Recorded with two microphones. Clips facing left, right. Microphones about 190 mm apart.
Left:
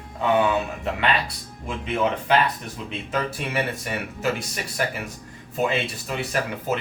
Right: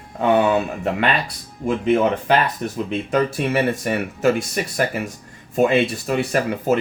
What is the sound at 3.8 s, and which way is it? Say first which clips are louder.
Speech: right 8 dB; 50° right (ahead or behind).